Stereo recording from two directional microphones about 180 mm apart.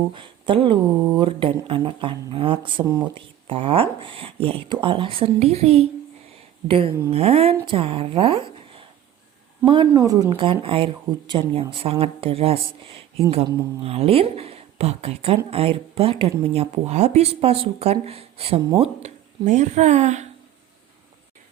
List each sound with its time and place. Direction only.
0.1 s speech: 30° right (ahead or behind)
2.8 s speech: 20° right (ahead or behind)
3.4 s a woman's voice: 30° right (ahead or behind)